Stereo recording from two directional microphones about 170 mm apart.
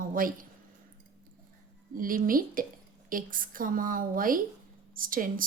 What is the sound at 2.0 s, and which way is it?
A woman's voice, 55° right (ahead or behind).